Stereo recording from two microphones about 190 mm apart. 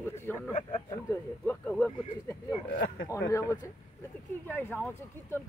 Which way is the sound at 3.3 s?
15° left (ahead or behind).